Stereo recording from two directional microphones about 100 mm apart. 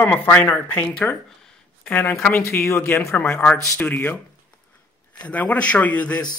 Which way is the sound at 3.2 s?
15° left (ahead or behind).